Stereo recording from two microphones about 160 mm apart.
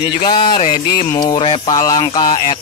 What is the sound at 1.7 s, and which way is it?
Music, 20° left (ahead or behind).